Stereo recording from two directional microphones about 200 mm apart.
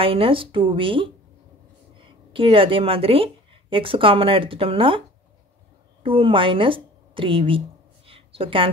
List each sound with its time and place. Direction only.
0.0 s speech: 25° right (ahead or behind)
2.3 s speech: 25° right (ahead or behind)
6.0 s speech: 25° right (ahead or behind)
8.1 s a sound: 25° right (ahead or behind)